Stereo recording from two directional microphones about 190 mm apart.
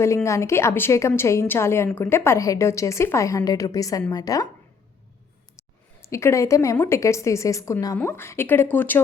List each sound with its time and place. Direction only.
0.0 s a woman's voice: 15° left (ahead or behind)
6.0 s a woman's voice: 15° left (ahead or behind)